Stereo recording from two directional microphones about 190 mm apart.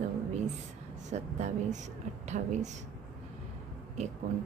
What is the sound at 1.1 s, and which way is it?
A woman's voice, 35° right (ahead or behind).